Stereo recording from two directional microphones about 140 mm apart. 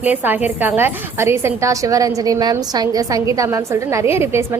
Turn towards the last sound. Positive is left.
turn(degrees=-20)  # may be behind; listen again after turning